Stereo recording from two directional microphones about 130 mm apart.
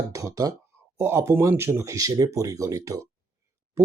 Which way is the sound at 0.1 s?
25° right (ahead or behind).